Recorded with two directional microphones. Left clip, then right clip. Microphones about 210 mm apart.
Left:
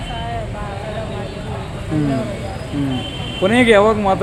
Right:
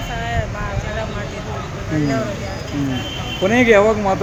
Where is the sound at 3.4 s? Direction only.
5° left (ahead or behind).